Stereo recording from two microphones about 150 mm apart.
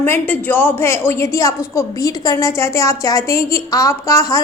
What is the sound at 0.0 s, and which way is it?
A woman's voice, 15° left (ahead or behind).